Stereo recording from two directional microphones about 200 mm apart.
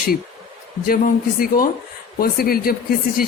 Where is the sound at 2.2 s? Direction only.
50° left (ahead or behind).